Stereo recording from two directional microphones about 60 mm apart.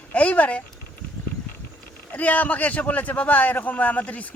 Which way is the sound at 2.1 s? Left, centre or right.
Left.